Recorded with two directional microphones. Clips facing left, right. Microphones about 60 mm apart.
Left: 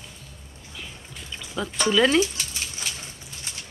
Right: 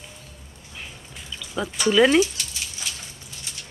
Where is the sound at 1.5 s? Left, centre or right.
Centre.